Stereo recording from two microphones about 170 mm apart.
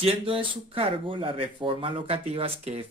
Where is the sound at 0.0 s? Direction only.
30° right (ahead or behind).